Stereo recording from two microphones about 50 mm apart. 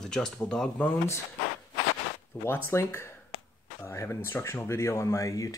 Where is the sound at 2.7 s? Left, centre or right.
Left.